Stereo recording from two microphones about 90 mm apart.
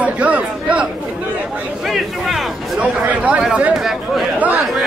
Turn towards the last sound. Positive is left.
turn(degrees=0)  # may be behind; listen again after turning